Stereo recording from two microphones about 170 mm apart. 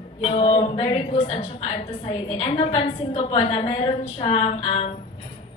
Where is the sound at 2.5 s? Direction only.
35° left (ahead or behind).